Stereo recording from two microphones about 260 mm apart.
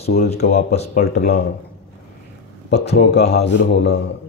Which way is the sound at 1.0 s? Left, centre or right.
Left.